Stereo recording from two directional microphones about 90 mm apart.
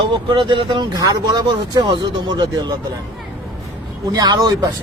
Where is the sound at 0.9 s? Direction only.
45° right (ahead or behind).